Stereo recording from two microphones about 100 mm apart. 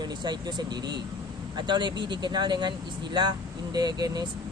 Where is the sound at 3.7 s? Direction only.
40° right (ahead or behind).